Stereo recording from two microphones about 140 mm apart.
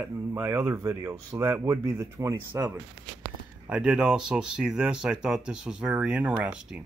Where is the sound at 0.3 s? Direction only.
20° right (ahead or behind).